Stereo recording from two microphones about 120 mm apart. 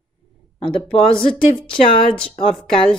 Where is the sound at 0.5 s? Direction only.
45° left (ahead or behind).